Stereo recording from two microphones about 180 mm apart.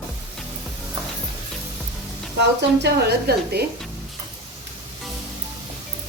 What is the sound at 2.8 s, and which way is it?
Speech, 65° right (ahead or behind).